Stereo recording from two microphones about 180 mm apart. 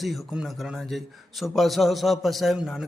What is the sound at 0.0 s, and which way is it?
A man's voice, centre (ahead or behind).